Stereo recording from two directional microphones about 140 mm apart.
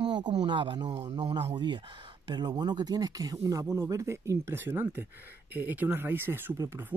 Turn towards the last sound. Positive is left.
turn(degrees=-15)  # may be behind; listen again after turning